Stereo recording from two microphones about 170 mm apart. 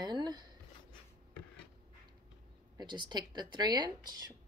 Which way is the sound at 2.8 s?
25° right (ahead or behind).